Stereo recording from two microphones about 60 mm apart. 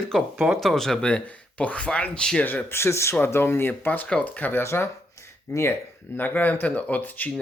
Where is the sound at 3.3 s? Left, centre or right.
Left.